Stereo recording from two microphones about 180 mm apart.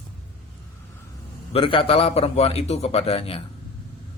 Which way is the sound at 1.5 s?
30° left (ahead or behind).